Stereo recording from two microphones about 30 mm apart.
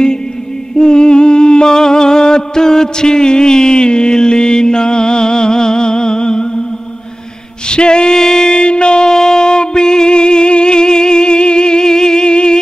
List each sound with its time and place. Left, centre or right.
0.7 s music: left
7.6 s music: left